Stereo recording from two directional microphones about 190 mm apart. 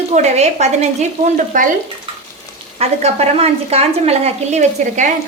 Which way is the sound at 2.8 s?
35° right (ahead or behind).